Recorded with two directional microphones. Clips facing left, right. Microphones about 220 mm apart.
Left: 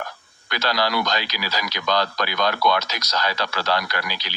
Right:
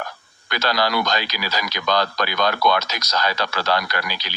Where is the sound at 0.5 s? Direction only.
50° right (ahead or behind).